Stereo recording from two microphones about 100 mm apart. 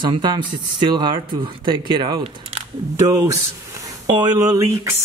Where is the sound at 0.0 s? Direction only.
50° right (ahead or behind).